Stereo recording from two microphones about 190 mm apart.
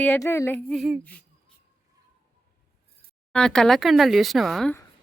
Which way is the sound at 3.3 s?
5° left (ahead or behind).